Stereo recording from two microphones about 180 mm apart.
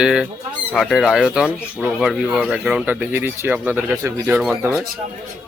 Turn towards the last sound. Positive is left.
turn(degrees=-10)  # may be behind; listen again after turning